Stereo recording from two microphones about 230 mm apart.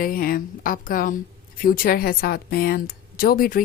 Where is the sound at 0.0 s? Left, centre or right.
Left.